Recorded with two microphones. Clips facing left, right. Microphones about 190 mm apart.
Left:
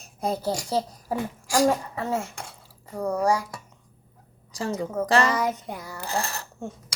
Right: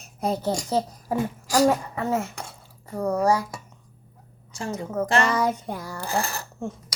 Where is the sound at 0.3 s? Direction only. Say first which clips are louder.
Right 1 dB; 10° left (ahead or behind).